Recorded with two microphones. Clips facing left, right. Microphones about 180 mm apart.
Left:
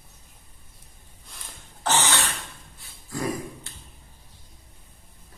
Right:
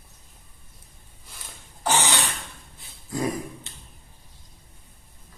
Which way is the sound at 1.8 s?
15° right (ahead or behind).